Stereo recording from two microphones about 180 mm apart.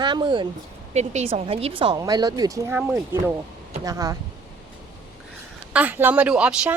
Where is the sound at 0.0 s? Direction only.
25° right (ahead or behind).